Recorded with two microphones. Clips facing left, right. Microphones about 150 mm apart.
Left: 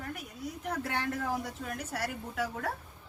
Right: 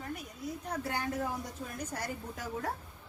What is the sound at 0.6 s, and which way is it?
A woman's voice, 70° left (ahead or behind).